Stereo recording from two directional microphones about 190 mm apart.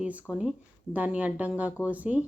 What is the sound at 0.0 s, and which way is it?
A woman's voice, 5° right (ahead or behind).